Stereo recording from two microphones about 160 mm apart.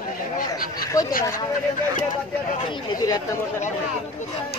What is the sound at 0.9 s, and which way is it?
Speech, 20° left (ahead or behind).